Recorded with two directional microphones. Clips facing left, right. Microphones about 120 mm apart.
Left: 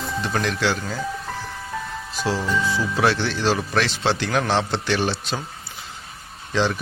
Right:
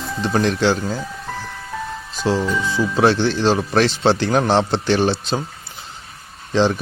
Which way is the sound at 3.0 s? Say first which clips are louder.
Right 6 dB; 30° right (ahead or behind).